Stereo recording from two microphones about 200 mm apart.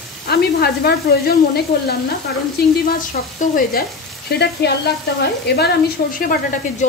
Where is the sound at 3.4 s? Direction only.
45° left (ahead or behind).